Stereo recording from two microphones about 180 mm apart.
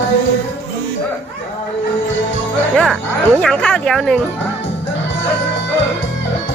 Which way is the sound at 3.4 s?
5° left (ahead or behind).